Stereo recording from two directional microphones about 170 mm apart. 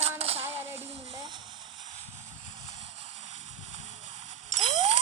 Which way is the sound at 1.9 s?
40° right (ahead or behind).